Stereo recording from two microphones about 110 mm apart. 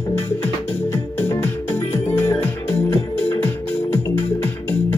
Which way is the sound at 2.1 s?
20° left (ahead or behind).